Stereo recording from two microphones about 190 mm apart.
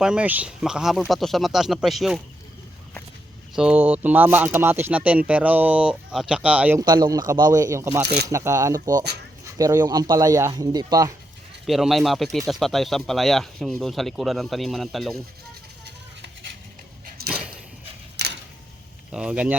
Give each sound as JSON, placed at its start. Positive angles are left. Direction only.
{"t": 0.0, "sound": "speech", "side_deg": -5}
{"t": 3.5, "sound": "speech", "side_deg": -5}
{"t": 6.7, "sound": "speech", "side_deg": -20}
{"t": 8.0, "sound": "speech", "side_deg": -55}
{"t": 8.3, "sound": "speech", "side_deg": -15}
{"t": 11.6, "sound": "speech", "side_deg": 0}
{"t": 16.2, "sound": "a sound", "side_deg": -65}
{"t": 19.1, "sound": "speech", "side_deg": -5}